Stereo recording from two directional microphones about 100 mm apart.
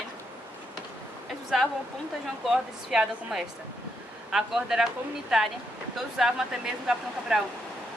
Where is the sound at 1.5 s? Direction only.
Centre (ahead or behind).